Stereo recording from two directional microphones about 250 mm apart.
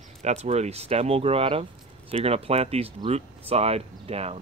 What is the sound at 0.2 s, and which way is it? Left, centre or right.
Speech, right.